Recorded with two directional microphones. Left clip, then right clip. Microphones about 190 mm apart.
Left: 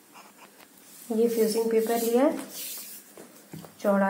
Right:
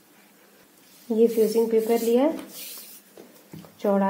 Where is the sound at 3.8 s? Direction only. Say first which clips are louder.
Right 1 dB; 40° right (ahead or behind).